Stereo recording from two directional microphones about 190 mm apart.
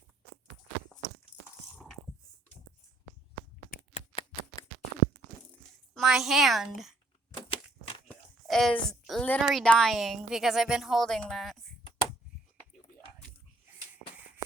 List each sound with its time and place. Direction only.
0.9 s walk: 5° left (ahead or behind)
3.9 s typewriter: 25° left (ahead or behind)
5.9 s a woman's voice: centre (ahead or behind)
7.3 s a sound: 25° left (ahead or behind)
8.0 s a sound: centre (ahead or behind)
9.4 s a woman's voice: centre (ahead or behind)